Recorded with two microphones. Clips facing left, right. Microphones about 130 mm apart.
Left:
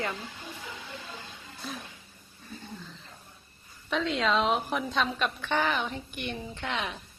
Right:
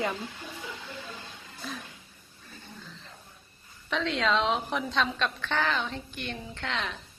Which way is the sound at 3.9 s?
Centre (ahead or behind).